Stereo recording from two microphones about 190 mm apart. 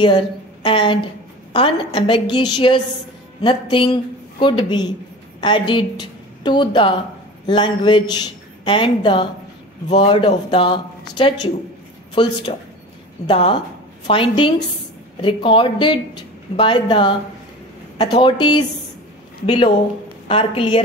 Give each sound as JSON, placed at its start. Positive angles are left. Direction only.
{"t": 0.0, "sound": "a woman's voice", "side_deg": 25}